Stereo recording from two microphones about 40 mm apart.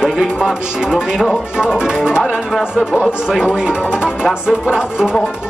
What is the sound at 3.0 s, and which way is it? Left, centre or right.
Speech, centre.